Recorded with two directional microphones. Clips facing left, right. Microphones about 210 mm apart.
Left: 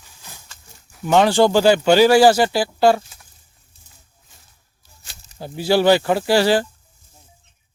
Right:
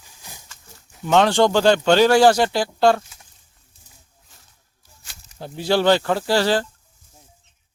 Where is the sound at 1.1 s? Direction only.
5° left (ahead or behind).